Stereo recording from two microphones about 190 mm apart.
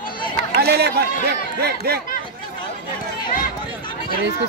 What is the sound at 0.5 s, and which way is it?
Speech, 55° right (ahead or behind).